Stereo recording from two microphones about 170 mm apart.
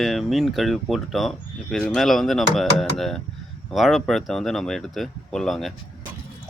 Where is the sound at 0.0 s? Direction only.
Centre (ahead or behind).